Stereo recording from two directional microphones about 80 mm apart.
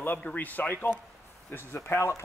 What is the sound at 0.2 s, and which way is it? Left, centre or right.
A man's voice, centre.